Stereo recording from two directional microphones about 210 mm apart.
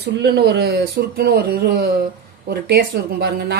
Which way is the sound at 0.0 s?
50° right (ahead or behind).